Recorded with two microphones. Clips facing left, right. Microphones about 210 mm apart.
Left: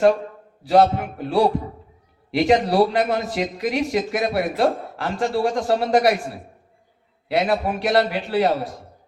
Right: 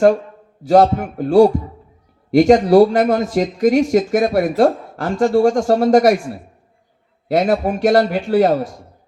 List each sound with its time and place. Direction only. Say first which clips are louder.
0.6 s speech: right 4 dB; 45° right (ahead or behind)
7.3 s speech: right 5 dB; 45° right (ahead or behind)